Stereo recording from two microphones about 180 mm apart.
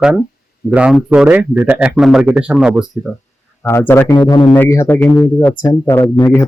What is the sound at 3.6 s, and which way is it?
Speech, 10° left (ahead or behind).